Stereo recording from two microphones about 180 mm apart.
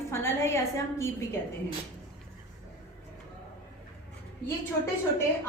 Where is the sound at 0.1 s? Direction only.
15° left (ahead or behind).